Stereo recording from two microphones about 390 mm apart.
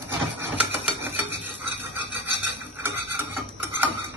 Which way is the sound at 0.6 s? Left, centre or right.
Centre.